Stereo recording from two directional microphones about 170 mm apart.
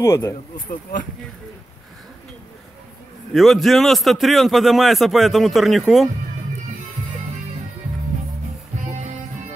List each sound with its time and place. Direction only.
0.0 s speech: 15° left (ahead or behind)
3.3 s a man's voice: centre (ahead or behind)